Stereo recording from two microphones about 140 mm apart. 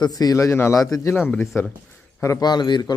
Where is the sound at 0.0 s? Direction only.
25° left (ahead or behind).